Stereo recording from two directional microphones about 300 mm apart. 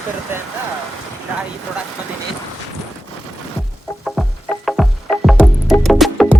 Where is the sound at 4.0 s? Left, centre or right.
Centre.